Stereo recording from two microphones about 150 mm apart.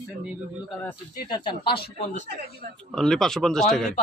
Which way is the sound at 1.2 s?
30° left (ahead or behind).